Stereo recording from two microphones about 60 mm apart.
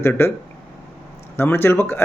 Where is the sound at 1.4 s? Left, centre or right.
Left.